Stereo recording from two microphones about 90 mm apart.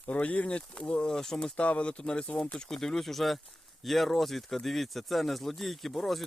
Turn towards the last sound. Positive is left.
turn(degrees=0)  # may be behind; listen again after turning